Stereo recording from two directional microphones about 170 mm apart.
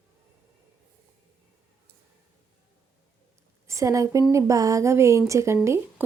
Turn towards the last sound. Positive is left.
turn(degrees=-15)  # may be behind; listen again after turning